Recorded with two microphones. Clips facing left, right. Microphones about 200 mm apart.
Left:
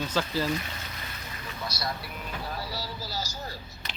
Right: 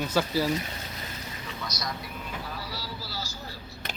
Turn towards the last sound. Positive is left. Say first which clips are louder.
# left 2 dB
turn(degrees=40)  # may be behind; listen again after turning